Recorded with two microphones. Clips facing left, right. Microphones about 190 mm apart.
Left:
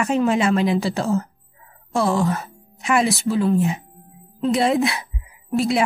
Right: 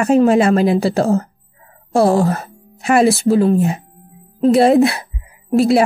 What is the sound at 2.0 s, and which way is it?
Speech, 55° right (ahead or behind).